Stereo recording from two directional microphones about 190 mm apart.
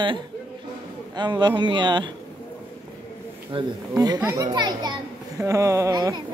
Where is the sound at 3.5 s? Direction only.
30° right (ahead or behind).